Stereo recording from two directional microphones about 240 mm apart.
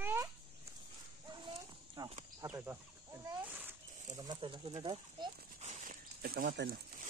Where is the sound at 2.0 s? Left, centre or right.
Centre; by 6.8 s right.